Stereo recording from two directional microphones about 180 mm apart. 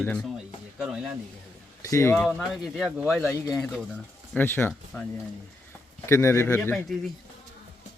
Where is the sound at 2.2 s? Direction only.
Centre (ahead or behind).